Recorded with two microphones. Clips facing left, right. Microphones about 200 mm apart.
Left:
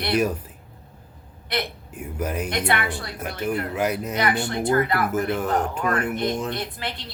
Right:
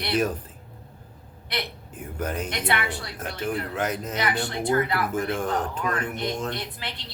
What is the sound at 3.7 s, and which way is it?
Speech, 10° left (ahead or behind).